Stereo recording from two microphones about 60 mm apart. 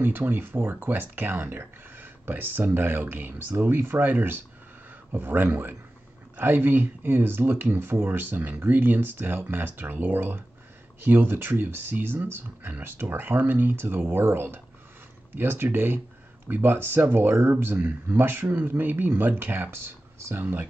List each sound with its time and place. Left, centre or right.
0.0 s speech: right